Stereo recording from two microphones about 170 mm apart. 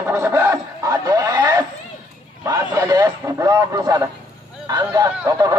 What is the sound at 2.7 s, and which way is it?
Speech, 20° right (ahead or behind).